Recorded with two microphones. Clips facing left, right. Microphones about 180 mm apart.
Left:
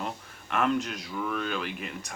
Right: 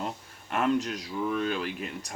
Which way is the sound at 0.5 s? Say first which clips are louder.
Right 1 dB; 35° right (ahead or behind).